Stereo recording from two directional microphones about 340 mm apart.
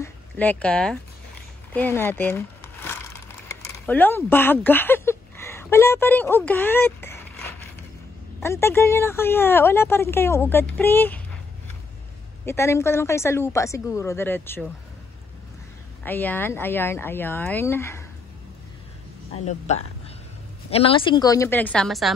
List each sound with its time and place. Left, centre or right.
0.0 s a sound: centre
3.7 s a woman's voice: centre
12.4 s a woman's voice: centre
16.0 s a woman's voice: centre
19.3 s a woman's voice: centre